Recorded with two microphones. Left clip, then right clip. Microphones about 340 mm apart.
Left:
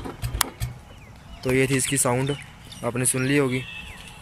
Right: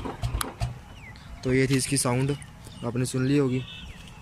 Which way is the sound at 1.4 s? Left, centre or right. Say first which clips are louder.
Left 3 dB; centre.